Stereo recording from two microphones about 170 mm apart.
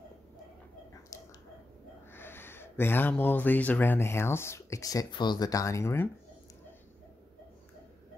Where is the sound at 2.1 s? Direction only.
15° left (ahead or behind).